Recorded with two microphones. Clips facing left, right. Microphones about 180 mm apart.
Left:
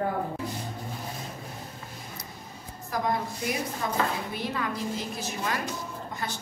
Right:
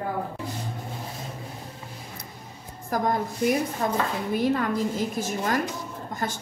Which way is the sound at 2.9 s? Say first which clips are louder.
Right 3 dB; 50° right (ahead or behind).